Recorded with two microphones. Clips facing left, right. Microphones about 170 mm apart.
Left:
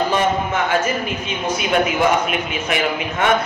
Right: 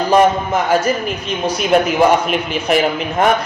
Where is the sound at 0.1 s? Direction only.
40° right (ahead or behind).